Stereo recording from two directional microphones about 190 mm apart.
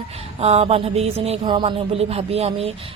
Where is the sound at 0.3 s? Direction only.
35° right (ahead or behind).